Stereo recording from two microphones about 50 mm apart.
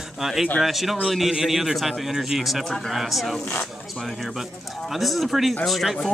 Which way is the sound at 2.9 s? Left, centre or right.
Centre.